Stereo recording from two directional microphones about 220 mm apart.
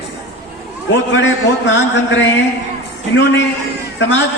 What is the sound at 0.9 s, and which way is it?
A man's voice, 55° left (ahead or behind).